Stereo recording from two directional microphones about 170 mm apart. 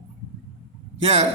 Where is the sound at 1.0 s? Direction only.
35° right (ahead or behind).